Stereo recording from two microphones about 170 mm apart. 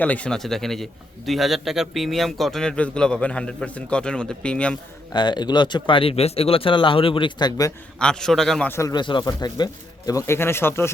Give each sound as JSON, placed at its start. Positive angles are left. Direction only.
{"t": 0.0, "sound": "a man's voice", "side_deg": 10}
{"t": 5.1, "sound": "speech", "side_deg": 25}
{"t": 7.9, "sound": "a man's voice", "side_deg": 5}
{"t": 8.7, "sound": "speech", "side_deg": 20}